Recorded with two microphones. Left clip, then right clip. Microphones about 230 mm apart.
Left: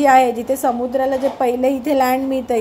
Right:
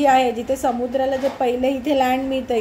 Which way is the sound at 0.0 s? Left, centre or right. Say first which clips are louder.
Left 4 dB; centre.